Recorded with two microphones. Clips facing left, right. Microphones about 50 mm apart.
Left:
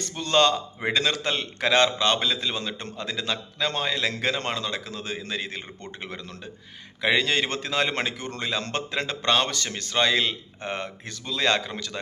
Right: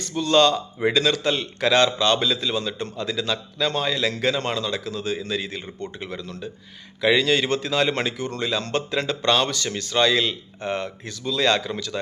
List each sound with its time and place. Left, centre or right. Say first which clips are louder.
0.1 s a man's voice: right 3 dB; left